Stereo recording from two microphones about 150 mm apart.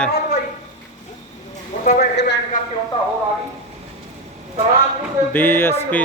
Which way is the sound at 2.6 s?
60° left (ahead or behind).